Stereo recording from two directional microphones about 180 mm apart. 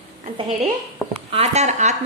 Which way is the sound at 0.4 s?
35° right (ahead or behind).